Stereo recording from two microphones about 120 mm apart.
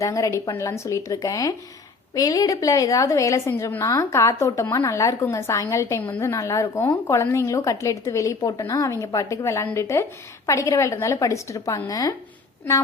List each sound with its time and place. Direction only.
0.0 s a woman's voice: 25° left (ahead or behind)